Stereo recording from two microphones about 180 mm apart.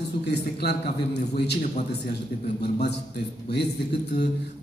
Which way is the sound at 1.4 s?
65° left (ahead or behind).